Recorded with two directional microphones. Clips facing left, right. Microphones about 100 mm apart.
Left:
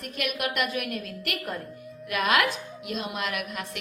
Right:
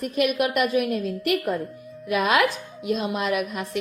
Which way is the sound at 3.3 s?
35° right (ahead or behind).